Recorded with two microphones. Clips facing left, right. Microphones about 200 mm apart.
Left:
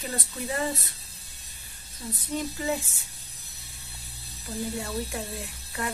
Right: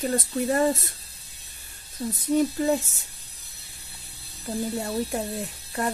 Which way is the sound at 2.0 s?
40° right (ahead or behind).